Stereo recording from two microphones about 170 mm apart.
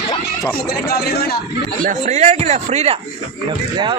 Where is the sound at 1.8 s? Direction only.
45° right (ahead or behind).